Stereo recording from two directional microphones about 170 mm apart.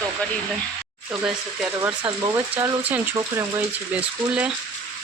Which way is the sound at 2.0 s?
20° right (ahead or behind).